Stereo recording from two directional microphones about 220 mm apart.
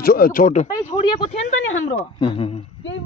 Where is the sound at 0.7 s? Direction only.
15° left (ahead or behind).